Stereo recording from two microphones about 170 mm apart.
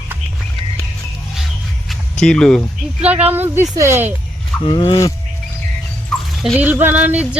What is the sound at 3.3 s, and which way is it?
Speech, 15° right (ahead or behind).